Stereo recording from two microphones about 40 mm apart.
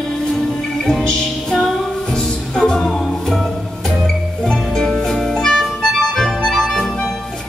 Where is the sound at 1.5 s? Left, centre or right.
Centre.